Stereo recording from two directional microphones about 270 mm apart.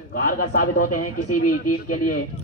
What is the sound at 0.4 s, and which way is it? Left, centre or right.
A man's voice, left.